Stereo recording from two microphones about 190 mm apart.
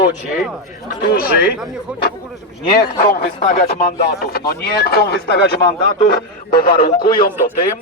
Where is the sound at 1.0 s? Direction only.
50° left (ahead or behind).